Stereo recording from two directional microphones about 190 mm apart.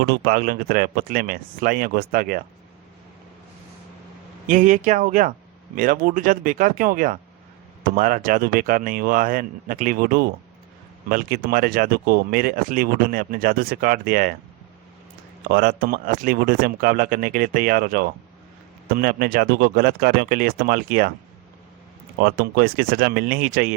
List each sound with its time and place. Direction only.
0.0 s speech: 55° right (ahead or behind)
4.4 s speech: 40° right (ahead or behind)
15.4 s speech: 50° right (ahead or behind)
22.2 s speech: 55° right (ahead or behind)